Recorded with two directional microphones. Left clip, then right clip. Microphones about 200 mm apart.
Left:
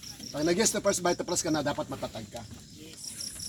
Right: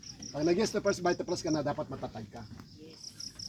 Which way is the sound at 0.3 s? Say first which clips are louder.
Left 2 dB; centre (ahead or behind).